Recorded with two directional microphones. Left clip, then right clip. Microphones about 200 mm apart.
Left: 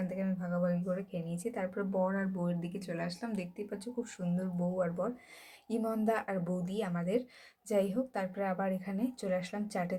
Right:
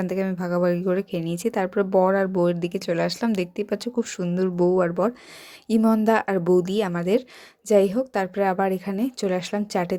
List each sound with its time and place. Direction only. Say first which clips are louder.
0.0 s a woman's voice: right 12 dB; 45° right (ahead or behind)